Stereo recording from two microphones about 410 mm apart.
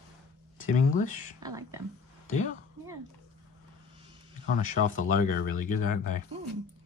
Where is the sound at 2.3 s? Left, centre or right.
Centre.